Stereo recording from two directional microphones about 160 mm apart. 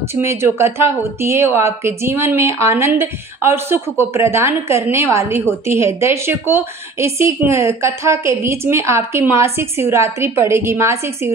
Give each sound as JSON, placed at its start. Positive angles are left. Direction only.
{"t": 0.1, "sound": "a woman's voice", "side_deg": -15}